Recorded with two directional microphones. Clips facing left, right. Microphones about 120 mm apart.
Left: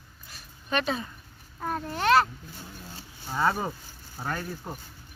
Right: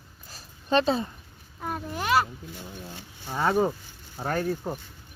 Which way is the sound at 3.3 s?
15° right (ahead or behind).